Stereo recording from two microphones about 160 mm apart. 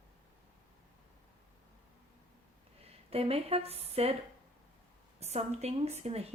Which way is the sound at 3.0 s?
40° right (ahead or behind).